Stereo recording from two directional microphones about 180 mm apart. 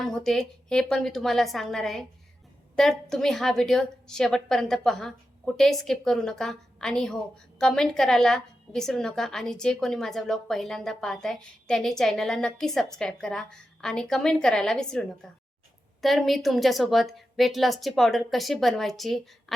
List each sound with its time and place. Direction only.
0.0 s a woman's voice: centre (ahead or behind)